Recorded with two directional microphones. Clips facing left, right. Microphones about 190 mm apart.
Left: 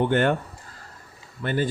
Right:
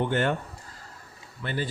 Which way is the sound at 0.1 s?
55° left (ahead or behind).